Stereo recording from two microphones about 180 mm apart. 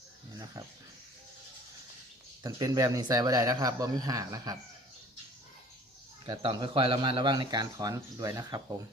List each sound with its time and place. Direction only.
2.4 s a man's voice: 20° right (ahead or behind)
6.2 s a man's voice: 25° right (ahead or behind)